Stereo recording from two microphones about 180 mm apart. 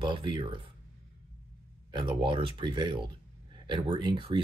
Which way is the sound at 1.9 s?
25° right (ahead or behind).